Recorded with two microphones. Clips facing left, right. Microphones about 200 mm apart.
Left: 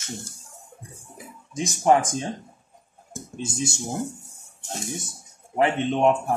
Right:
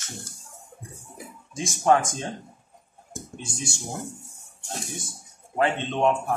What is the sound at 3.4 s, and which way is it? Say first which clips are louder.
Speech: left 8 dB; 25° left (ahead or behind).